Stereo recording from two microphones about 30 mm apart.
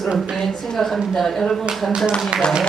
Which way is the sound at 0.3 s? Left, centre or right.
Centre.